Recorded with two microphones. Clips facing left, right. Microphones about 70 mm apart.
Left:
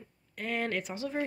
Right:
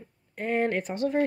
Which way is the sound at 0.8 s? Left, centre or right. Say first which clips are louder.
Right 8 dB; right.